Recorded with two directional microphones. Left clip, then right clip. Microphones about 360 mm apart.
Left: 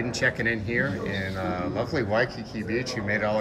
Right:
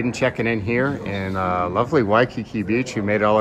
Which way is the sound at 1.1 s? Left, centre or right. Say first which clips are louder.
Right 5 dB; right.